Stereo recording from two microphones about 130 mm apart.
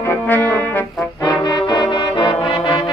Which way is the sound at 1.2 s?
30° left (ahead or behind).